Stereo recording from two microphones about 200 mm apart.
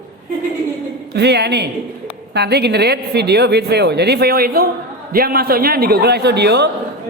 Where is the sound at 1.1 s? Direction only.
55° right (ahead or behind).